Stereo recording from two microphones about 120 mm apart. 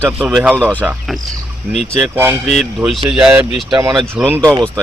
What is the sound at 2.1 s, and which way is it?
Speech, 20° right (ahead or behind).